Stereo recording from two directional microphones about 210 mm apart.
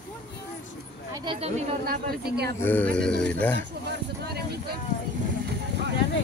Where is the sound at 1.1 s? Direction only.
25° right (ahead or behind).